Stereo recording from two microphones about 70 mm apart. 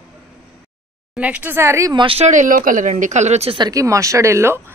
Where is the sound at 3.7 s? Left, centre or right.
Right.